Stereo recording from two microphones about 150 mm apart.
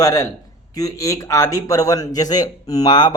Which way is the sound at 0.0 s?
20° left (ahead or behind).